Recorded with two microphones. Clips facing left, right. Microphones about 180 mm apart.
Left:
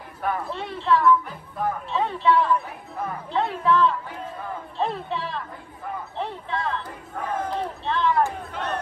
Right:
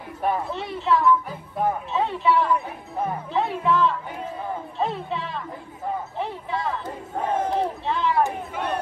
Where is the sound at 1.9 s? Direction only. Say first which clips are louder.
Even; 5° right (ahead or behind).